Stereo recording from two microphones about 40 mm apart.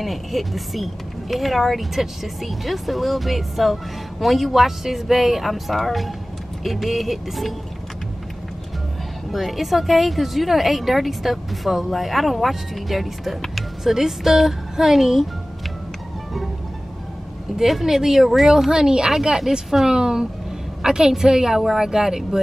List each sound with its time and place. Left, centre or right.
0.0 s speech: centre
9.3 s a woman's voice: centre
17.6 s speech: centre
18.7 s a woman's voice: centre
19.1 s speech: centre
19.9 s a woman's voice: centre